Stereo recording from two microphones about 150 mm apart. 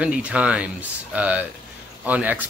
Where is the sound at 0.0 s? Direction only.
10° right (ahead or behind).